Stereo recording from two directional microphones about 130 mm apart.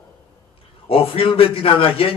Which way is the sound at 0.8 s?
45° left (ahead or behind).